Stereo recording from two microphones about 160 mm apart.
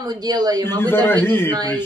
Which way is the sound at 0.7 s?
15° left (ahead or behind).